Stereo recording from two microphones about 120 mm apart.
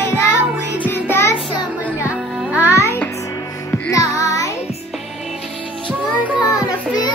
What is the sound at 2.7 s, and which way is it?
Music, 25° left (ahead or behind).